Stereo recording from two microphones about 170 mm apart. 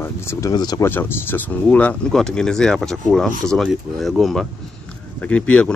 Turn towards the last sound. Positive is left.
turn(degrees=5)  # may be behind; listen again after turning